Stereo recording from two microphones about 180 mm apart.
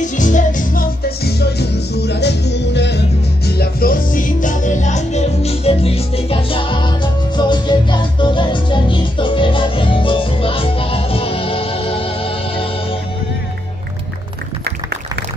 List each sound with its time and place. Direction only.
0.0 s music: 45° left (ahead or behind); by 3.0 s 70° left (ahead or behind)
3.4 s music: 60° left (ahead or behind); by 12.6 s 30° left (ahead or behind)